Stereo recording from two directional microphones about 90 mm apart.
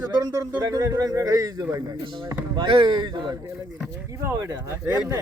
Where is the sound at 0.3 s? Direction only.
40° right (ahead or behind).